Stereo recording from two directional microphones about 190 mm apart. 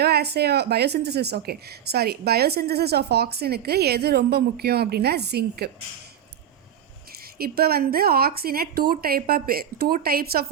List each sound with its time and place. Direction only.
0.0 s speech: 60° right (ahead or behind)
7.1 s a woman's voice: 55° right (ahead or behind)